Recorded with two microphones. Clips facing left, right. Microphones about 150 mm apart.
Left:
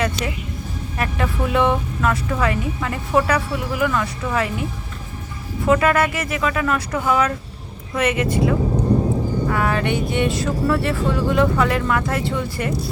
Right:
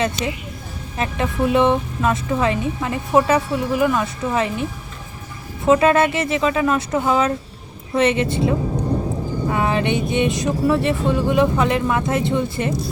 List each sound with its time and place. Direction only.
0.2 s speech: 20° right (ahead or behind)
5.6 s speech: 25° right (ahead or behind)